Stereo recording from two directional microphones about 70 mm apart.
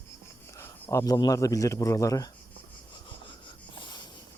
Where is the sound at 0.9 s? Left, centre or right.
Left.